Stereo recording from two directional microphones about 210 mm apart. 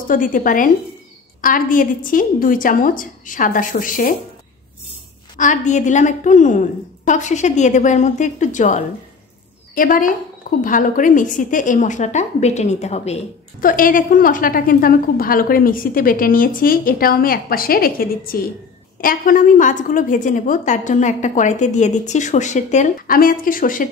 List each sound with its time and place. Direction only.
0.1 s a woman's voice: 40° left (ahead or behind)
5.4 s a woman's voice: 35° left (ahead or behind)